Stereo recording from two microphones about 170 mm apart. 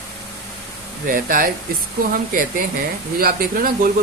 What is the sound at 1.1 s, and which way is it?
Speech, 55° right (ahead or behind).